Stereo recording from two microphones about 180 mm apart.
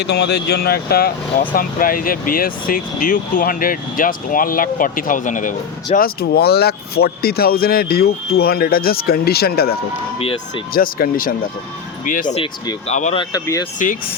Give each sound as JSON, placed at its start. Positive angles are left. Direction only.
{"t": 0.0, "sound": "speech", "side_deg": 65}
{"t": 10.8, "sound": "speech", "side_deg": 55}
{"t": 12.9, "sound": "speech", "side_deg": 40}
{"t": 13.3, "sound": "speech", "side_deg": 20}